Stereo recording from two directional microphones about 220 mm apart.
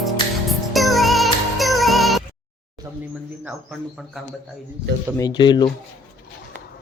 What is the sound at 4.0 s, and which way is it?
Speech, centre (ahead or behind).